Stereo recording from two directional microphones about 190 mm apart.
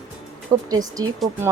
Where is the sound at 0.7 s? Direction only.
20° right (ahead or behind).